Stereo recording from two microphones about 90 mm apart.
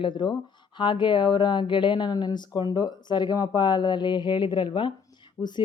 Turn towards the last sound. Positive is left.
turn(degrees=55)  # may be behind; listen again after turning